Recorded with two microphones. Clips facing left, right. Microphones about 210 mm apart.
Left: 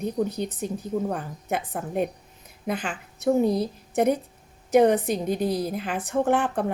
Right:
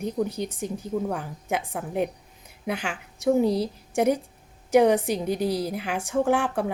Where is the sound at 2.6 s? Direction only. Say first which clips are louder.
Left 1 dB; 70° right (ahead or behind).